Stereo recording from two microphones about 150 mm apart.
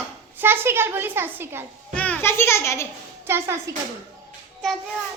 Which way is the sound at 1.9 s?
10° left (ahead or behind).